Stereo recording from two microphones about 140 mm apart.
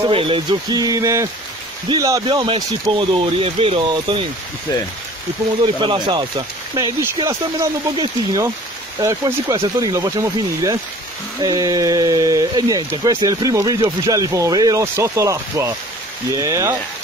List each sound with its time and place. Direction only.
0.0 s speech: 40° right (ahead or behind)
0.5 s speech: 30° right (ahead or behind)
2.2 s speech: 35° right (ahead or behind)
5.8 s speech: 35° right (ahead or behind)